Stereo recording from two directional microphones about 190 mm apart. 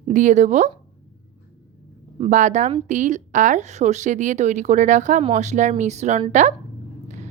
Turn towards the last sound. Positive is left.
turn(degrees=-40)  # may be behind; listen again after turning